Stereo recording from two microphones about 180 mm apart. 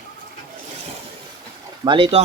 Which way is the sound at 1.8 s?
30° right (ahead or behind).